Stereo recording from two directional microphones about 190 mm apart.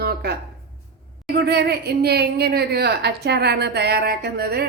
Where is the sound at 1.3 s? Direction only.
60° right (ahead or behind).